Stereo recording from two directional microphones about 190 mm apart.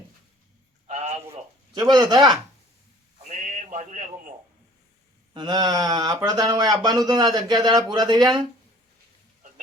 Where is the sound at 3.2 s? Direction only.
40° right (ahead or behind).